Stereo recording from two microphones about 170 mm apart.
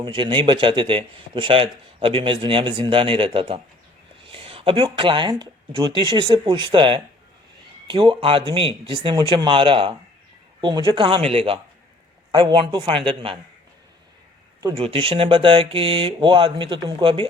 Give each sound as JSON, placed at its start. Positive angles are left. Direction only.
{"t": 0.0, "sound": "a man's voice", "side_deg": -30}
{"t": 14.8, "sound": "speech", "side_deg": -35}